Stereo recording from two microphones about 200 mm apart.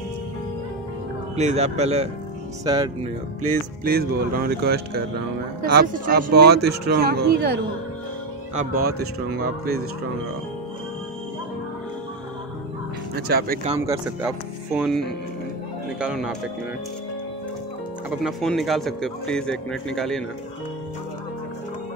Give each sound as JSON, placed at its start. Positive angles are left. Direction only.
{"t": 1.3, "sound": "speech", "side_deg": -35}
{"t": 2.6, "sound": "speech", "side_deg": -20}
{"t": 3.8, "sound": "speech", "side_deg": -50}
{"t": 13.1, "sound": "speech", "side_deg": -50}
{"t": 13.7, "sound": "speech", "side_deg": -10}
{"t": 18.2, "sound": "speech", "side_deg": 0}